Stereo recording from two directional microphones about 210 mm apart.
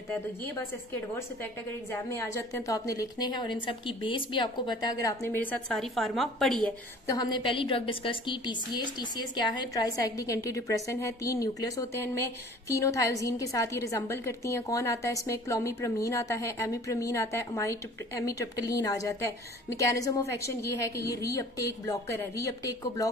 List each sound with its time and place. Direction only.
1.1 s a woman's voice: 10° left (ahead or behind)
7.1 s a woman's voice: 20° left (ahead or behind)